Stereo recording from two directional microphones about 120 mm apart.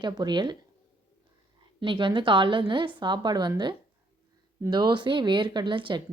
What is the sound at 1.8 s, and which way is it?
A woman's voice, 45° right (ahead or behind).